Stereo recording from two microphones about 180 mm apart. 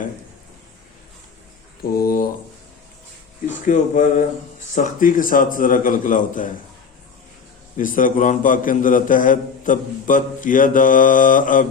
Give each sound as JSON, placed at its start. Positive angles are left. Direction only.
{"t": 1.8, "sound": "a sound", "side_deg": 55}
{"t": 3.7, "sound": "a man's voice", "side_deg": 45}
{"t": 7.8, "sound": "a man's voice", "side_deg": 50}